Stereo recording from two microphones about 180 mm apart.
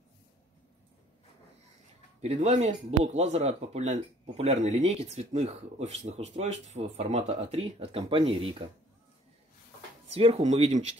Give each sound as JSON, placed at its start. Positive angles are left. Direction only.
{"t": 2.2, "sound": "speech", "side_deg": -40}
{"t": 10.1, "sound": "speech", "side_deg": -35}